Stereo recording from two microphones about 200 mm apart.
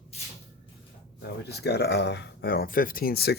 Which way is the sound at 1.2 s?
55° left (ahead or behind).